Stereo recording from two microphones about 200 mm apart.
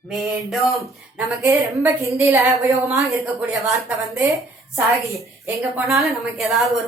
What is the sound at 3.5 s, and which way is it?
Speech, 15° right (ahead or behind).